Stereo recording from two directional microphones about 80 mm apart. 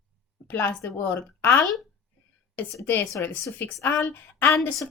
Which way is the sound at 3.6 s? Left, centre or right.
Left.